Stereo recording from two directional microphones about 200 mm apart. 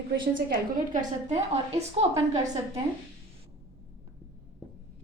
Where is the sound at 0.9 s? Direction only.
35° right (ahead or behind).